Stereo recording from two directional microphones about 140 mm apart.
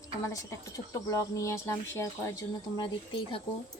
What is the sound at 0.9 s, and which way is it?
Speech, 25° left (ahead or behind).